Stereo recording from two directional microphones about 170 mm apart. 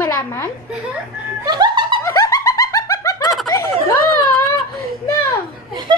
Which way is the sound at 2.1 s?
20° left (ahead or behind).